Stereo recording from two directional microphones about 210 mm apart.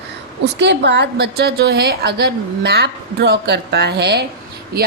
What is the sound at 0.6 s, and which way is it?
A woman's voice, 55° right (ahead or behind).